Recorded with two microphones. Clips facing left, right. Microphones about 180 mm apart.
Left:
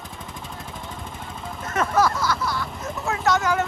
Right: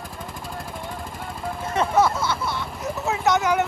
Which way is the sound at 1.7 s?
25° right (ahead or behind).